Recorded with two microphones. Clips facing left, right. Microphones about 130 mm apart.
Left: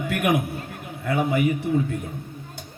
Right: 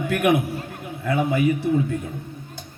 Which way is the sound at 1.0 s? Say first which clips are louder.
Right 1 dB; 40° left (ahead or behind).